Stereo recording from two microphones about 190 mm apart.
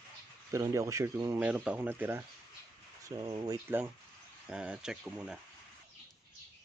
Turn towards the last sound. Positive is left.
turn(degrees=-5)  # may be behind; listen again after turning